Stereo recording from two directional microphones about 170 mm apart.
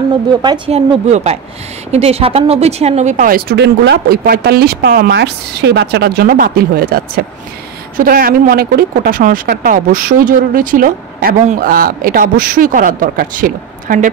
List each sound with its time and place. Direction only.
0.7 s speech: 35° right (ahead or behind)